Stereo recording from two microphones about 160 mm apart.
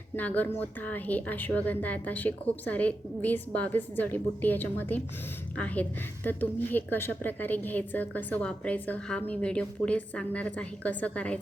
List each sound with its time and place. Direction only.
0.2 s a woman's voice: 10° left (ahead or behind)